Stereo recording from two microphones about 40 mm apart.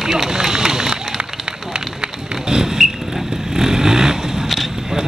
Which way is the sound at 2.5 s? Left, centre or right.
Centre.